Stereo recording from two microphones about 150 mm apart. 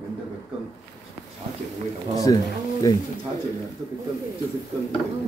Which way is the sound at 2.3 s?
25° left (ahead or behind).